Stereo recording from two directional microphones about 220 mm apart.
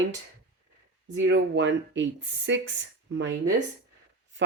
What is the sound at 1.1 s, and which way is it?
Speech, 55° right (ahead or behind).